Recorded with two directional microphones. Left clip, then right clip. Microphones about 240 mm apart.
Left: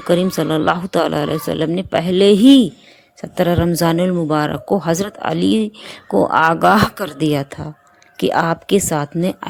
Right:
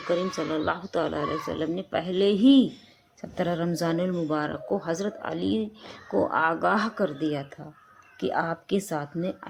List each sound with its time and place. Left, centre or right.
0.1 s speech: left